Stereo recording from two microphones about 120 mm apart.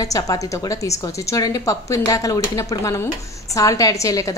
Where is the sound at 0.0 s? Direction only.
30° left (ahead or behind).